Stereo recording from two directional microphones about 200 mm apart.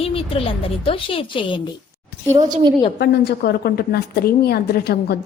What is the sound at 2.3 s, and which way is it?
Speech, 20° right (ahead or behind).